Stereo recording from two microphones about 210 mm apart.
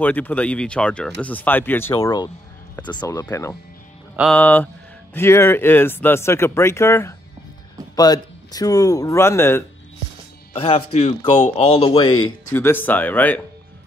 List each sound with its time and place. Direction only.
0.0 s speech: 10° left (ahead or behind)
10.5 s speech: 25° left (ahead or behind); by 13.4 s 10° left (ahead or behind)